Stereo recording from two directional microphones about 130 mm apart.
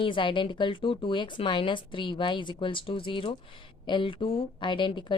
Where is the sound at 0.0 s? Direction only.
40° left (ahead or behind).